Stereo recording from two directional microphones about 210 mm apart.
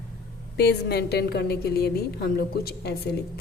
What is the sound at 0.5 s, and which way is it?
Speech, 50° left (ahead or behind).